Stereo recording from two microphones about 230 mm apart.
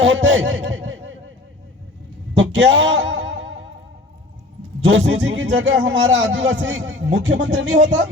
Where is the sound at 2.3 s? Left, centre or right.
Right.